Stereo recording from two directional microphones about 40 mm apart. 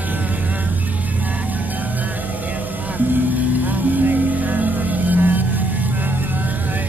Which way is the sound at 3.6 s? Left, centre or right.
Right.